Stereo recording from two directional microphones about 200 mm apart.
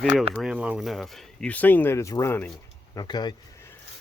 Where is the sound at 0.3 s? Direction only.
5° right (ahead or behind); by 3.3 s 20° left (ahead or behind).